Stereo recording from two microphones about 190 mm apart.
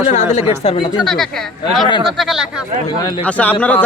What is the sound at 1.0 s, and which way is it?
Speech, centre (ahead or behind).